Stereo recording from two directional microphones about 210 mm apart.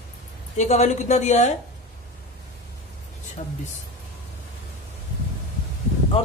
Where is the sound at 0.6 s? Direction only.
35° left (ahead or behind).